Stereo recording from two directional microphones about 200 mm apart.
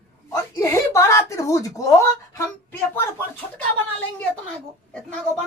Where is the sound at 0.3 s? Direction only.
15° left (ahead or behind).